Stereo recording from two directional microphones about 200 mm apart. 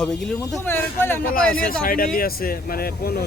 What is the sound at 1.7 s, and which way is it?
Speech, 45° left (ahead or behind).